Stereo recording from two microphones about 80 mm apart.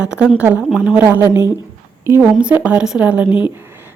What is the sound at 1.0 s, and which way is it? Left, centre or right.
Speech, right.